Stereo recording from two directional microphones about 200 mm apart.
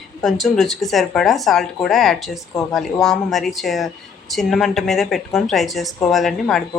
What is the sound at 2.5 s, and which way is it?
Speech, 15° left (ahead or behind).